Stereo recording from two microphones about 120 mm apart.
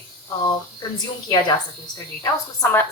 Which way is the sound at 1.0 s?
35° left (ahead or behind).